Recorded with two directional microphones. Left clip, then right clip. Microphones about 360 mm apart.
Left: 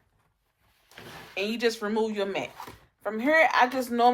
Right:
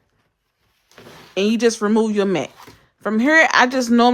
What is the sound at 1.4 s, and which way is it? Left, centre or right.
Speech, centre.